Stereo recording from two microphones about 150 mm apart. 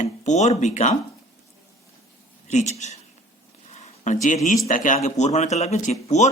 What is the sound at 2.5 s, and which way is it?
Speech, 50° left (ahead or behind).